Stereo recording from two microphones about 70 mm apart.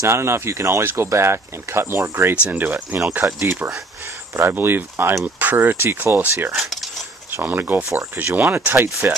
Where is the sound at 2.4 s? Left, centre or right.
Right.